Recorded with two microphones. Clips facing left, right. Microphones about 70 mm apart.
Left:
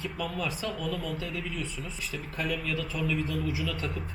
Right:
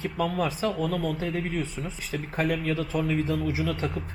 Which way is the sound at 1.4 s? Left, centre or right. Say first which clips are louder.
Right 6 dB; right.